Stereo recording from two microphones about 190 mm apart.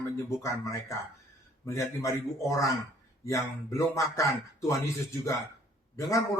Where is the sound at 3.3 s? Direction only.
15° left (ahead or behind).